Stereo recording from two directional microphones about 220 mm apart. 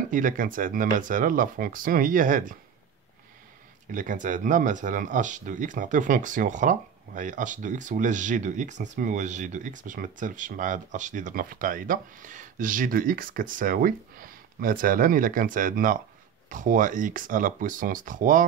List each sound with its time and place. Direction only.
0.1 s speech: 35° right (ahead or behind)
3.9 s speech: 35° right (ahead or behind)